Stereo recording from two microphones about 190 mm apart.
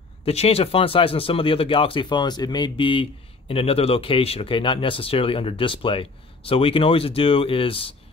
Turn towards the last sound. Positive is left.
turn(degrees=30)  # may be behind; listen again after turning